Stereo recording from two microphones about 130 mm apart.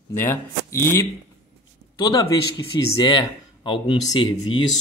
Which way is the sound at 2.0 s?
30° left (ahead or behind).